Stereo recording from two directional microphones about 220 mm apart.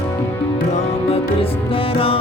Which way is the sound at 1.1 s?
25° left (ahead or behind).